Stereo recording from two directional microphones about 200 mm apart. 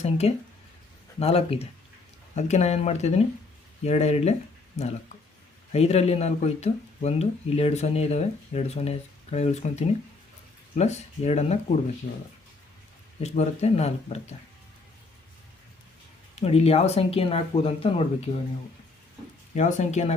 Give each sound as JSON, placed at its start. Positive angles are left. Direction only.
{"t": 0.0, "sound": "speech", "side_deg": 30}
{"t": 13.2, "sound": "speech", "side_deg": 35}
{"t": 16.3, "sound": "speech", "side_deg": 30}
{"t": 19.5, "sound": "speech", "side_deg": 35}